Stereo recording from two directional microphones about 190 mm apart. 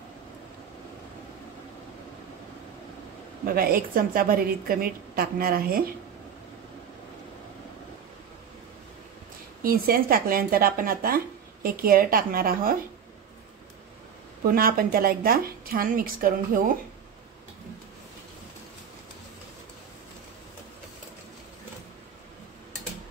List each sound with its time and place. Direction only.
3.5 s speech: 50° right (ahead or behind)
9.6 s speech: 50° right (ahead or behind)
14.5 s speech: 50° right (ahead or behind)